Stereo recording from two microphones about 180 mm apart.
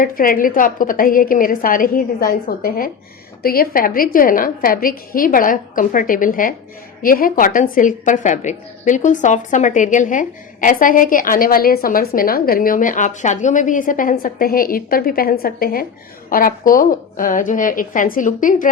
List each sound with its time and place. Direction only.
0.0 s a woman's voice: 50° left (ahead or behind)